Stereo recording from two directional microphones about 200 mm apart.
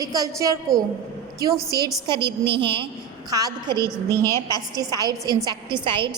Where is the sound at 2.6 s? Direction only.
25° right (ahead or behind).